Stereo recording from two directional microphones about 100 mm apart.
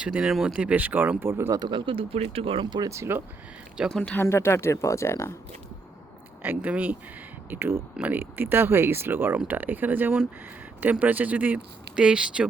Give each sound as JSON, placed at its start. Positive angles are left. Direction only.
{"t": 0.0, "sound": "speech", "side_deg": -10}
{"t": 1.5, "sound": "speech", "side_deg": -50}
{"t": 2.9, "sound": "speech", "side_deg": -25}
{"t": 3.8, "sound": "speech", "side_deg": 0}
{"t": 4.1, "sound": "speech", "side_deg": 25}
{"t": 6.4, "sound": "speech", "side_deg": -15}